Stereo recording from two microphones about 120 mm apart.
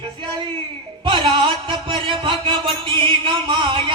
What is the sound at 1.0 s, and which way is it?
Music, 45° right (ahead or behind).